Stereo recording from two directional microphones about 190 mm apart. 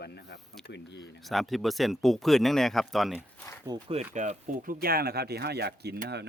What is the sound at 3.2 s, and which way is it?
Speech, 10° left (ahead or behind).